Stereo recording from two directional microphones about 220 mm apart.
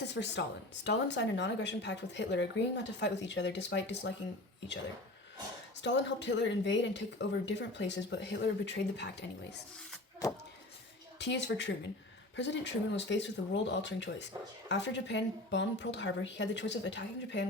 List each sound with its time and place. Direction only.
0.1 s speech: 50° left (ahead or behind)
5.8 s speech: 55° left (ahead or behind)
11.2 s speech: 50° left (ahead or behind)